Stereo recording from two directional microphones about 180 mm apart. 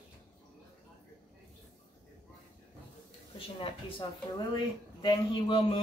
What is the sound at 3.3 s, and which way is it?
A woman's voice, 30° left (ahead or behind).